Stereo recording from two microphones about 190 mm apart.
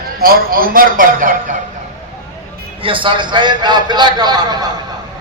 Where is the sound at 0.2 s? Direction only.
50° right (ahead or behind).